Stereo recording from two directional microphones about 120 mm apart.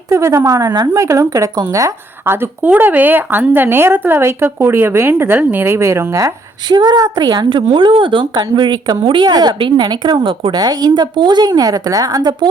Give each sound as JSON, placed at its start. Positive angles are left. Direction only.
{"t": 0.1, "sound": "a woman's voice", "side_deg": -25}